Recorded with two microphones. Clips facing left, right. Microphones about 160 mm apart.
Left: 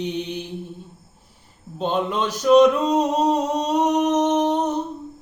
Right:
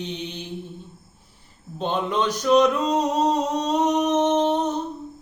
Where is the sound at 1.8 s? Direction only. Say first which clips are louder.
Left 1 dB; 10° left (ahead or behind).